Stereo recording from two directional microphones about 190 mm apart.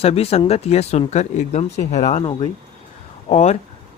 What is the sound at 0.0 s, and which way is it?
Speech, 30° left (ahead or behind).